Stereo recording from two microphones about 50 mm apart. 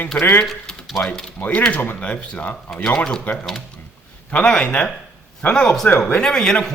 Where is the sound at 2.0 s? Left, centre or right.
Left.